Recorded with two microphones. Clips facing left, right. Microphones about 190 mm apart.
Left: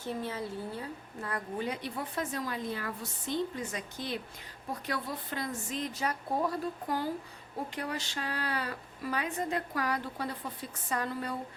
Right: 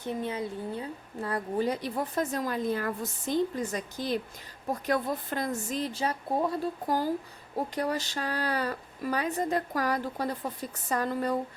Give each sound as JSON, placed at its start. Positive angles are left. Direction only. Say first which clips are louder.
{"t": 0.0, "sound": "a woman's voice", "louder": "right 4 dB", "side_deg": -20}
{"t": 6.8, "sound": "a woman's voice", "louder": "right 5 dB", "side_deg": -40}